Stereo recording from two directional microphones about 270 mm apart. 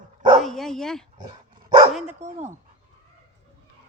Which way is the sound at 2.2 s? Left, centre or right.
Right.